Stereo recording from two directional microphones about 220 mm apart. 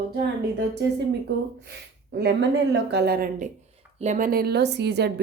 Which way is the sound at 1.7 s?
50° right (ahead or behind).